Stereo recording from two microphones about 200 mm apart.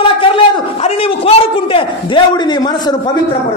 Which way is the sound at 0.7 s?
30° left (ahead or behind).